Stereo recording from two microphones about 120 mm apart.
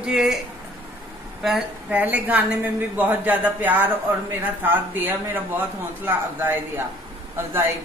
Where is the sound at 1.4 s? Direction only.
10° right (ahead or behind).